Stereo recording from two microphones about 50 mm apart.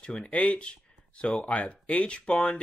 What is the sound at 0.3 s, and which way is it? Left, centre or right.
Speech, left.